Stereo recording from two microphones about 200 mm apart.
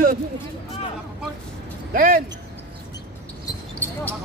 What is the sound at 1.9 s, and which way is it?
Speech, 45° right (ahead or behind).